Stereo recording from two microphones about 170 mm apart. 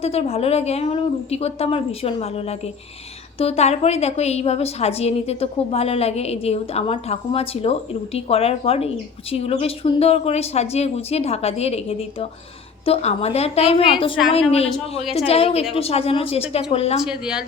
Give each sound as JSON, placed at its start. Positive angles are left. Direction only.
{"t": 0.0, "sound": "a woman's voice", "side_deg": 35}
{"t": 17.0, "sound": "speech", "side_deg": -5}